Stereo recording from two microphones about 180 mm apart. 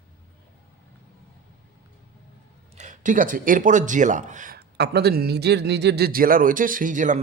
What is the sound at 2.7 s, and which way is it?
Speech, 45° right (ahead or behind).